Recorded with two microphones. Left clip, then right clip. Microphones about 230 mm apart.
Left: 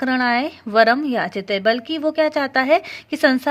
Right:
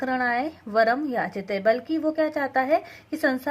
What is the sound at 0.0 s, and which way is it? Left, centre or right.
A woman's voice, left.